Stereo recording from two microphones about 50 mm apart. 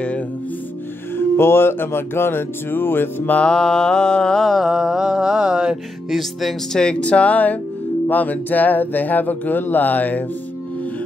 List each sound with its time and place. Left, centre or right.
1.1 s music: left
3.4 s mantra: centre
4.5 s mantra: centre
6.0 s speech: centre
6.7 s speech: centre; by 10.2 s left